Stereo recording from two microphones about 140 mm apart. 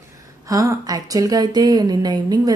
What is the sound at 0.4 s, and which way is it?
Speech, 25° right (ahead or behind).